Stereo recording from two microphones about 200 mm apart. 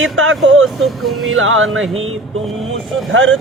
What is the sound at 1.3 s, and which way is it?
Speech, 85° right.